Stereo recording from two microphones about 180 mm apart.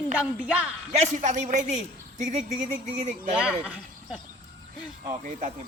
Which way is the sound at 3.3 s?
5° right (ahead or behind).